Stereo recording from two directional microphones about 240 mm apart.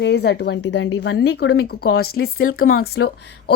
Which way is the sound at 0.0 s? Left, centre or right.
Left.